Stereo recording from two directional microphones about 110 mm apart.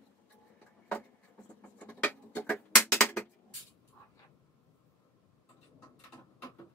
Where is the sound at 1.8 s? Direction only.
15° left (ahead or behind).